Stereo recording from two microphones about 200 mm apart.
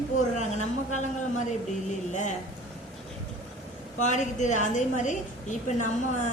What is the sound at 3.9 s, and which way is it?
A woman's voice, 35° left (ahead or behind).